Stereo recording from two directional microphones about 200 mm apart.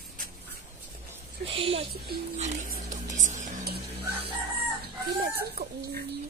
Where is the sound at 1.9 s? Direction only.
50° right (ahead or behind).